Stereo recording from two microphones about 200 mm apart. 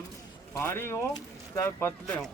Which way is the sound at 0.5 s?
10° left (ahead or behind).